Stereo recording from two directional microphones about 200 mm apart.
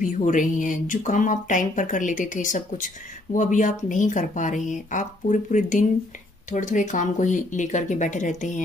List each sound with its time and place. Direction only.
0.0 s speech: 40° left (ahead or behind)